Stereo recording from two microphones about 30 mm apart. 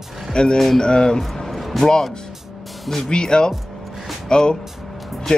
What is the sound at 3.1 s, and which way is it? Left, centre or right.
Speech, left.